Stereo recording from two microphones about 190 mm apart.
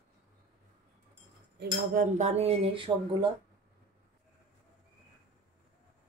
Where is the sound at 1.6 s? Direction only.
45° right (ahead or behind); by 3.3 s 25° right (ahead or behind).